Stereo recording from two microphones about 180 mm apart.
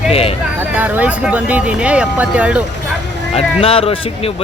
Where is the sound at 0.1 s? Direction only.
35° left (ahead or behind).